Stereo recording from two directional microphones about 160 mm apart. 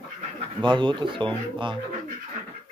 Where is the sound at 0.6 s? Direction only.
30° right (ahead or behind).